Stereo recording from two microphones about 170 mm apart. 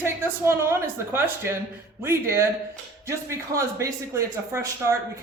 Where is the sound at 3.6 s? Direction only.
15° right (ahead or behind).